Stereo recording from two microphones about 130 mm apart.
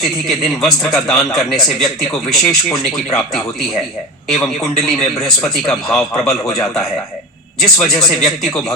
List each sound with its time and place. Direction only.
0.3 s a man's voice: centre (ahead or behind)